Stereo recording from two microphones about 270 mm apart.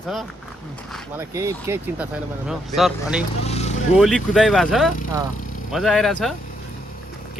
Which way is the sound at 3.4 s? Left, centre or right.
Left.